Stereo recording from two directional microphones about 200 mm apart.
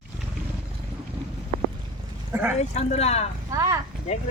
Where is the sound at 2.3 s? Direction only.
10° right (ahead or behind).